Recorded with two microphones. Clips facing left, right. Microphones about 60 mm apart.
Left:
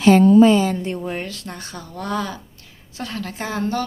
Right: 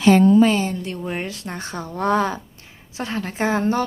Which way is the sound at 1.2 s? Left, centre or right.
Right.